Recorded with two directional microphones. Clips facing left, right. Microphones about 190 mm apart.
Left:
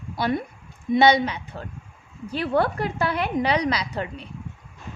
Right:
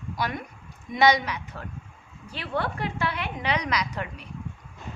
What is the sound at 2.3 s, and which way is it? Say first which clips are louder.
A woman's voice: left 7 dB; 40° left (ahead or behind).